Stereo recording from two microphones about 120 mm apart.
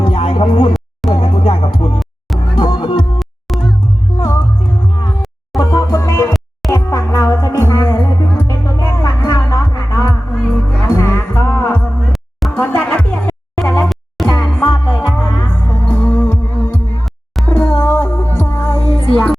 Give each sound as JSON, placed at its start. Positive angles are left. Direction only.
{"t": 0.0, "sound": "a sound", "side_deg": 50}
{"t": 1.1, "sound": "music", "side_deg": 45}
{"t": 3.2, "sound": "music", "side_deg": 0}
{"t": 5.5, "sound": "music", "side_deg": 25}
{"t": 10.3, "sound": "music", "side_deg": 10}
{"t": 10.8, "sound": "music", "side_deg": 25}
{"t": 14.4, "sound": "music", "side_deg": 5}
{"t": 19.1, "sound": "a sound", "side_deg": 5}